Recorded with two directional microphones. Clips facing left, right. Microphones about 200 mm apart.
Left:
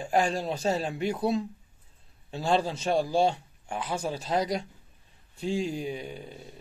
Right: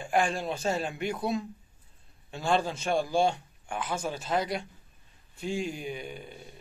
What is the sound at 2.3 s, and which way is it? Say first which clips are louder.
Speech: left 1 dB; 35° left (ahead or behind).